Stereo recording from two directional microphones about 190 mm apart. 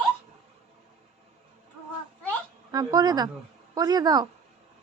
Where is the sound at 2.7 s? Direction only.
20° right (ahead or behind).